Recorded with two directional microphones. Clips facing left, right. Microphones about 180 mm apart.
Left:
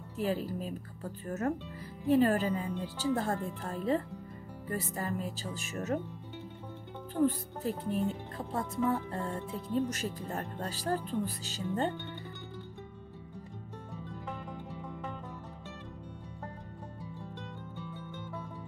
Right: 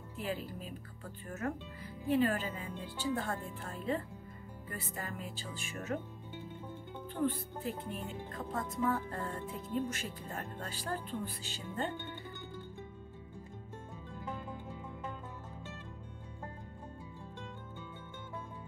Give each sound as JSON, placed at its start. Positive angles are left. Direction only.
{"t": 0.2, "sound": "speech", "side_deg": 40}
{"t": 7.2, "sound": "speech", "side_deg": 40}
{"t": 9.8, "sound": "speech", "side_deg": 40}